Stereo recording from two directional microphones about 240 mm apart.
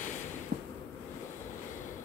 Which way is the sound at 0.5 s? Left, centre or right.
Right.